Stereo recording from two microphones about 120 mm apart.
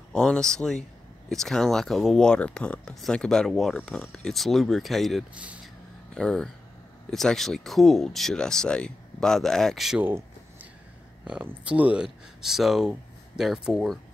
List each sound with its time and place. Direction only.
0.1 s speech: 5° left (ahead or behind)
5.3 s speech: 10° right (ahead or behind)
6.1 s speech: 5° left (ahead or behind)
10.0 s a sound: 15° right (ahead or behind)
11.2 s speech: 10° right (ahead or behind)